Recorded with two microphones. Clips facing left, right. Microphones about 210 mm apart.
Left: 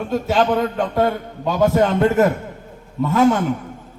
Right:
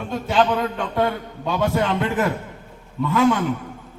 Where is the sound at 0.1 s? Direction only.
45° left (ahead or behind).